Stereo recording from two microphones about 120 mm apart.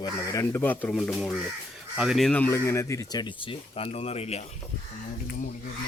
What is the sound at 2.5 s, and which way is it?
Speech, 25° left (ahead or behind).